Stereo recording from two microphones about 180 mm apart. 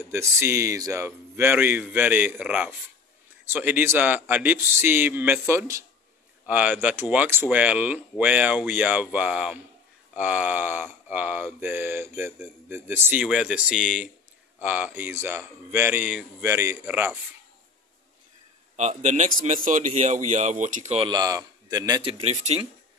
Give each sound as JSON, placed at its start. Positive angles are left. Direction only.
{"t": 0.0, "sound": "speech", "side_deg": -15}
{"t": 18.8, "sound": "a man's voice", "side_deg": -40}
{"t": 21.1, "sound": "a man's voice", "side_deg": -20}
{"t": 22.2, "sound": "a man's voice", "side_deg": -40}